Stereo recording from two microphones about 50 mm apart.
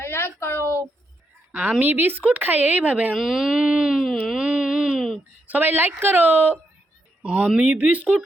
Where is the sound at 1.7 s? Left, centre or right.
Right.